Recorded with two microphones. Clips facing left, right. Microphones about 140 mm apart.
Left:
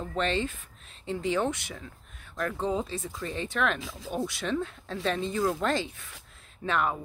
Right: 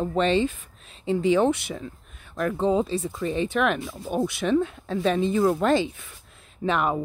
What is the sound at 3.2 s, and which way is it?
Speech, 15° right (ahead or behind).